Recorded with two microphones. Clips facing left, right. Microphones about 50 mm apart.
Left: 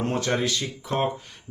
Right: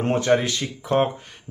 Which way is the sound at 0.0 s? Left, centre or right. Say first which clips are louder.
Right 5 dB; right.